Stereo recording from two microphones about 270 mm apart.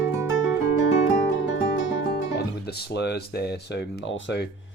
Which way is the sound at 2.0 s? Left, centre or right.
Left.